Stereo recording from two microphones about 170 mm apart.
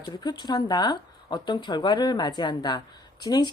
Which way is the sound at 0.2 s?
25° left (ahead or behind).